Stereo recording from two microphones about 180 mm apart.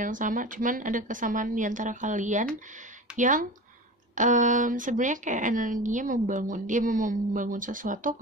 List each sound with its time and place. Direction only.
0.0 s speech: 45° right (ahead or behind)